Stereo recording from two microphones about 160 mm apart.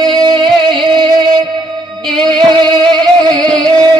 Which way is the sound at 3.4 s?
5° left (ahead or behind).